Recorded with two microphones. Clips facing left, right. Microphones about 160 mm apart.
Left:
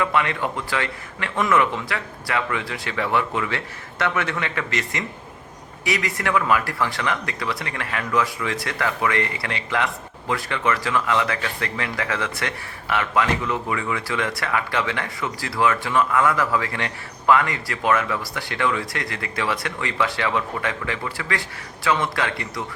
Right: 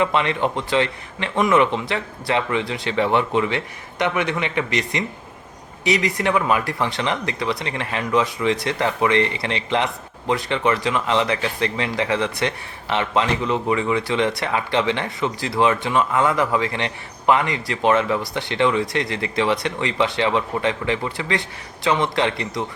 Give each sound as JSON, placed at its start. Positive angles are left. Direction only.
{"t": 0.0, "sound": "speech", "side_deg": -25}